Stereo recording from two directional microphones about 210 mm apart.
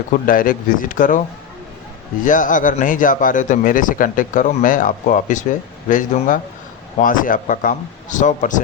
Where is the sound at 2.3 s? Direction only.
40° left (ahead or behind).